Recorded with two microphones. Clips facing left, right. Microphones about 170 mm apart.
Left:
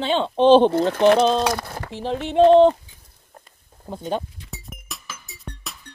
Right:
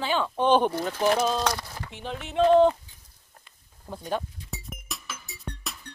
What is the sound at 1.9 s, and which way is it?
Speech, 35° left (ahead or behind).